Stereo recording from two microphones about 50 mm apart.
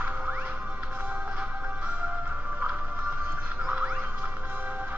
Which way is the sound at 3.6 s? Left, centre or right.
Right.